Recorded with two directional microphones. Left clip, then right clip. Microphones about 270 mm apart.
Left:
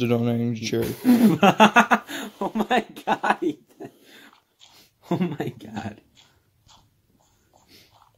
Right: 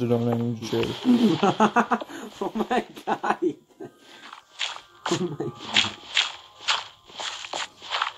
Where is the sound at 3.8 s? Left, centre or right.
Left.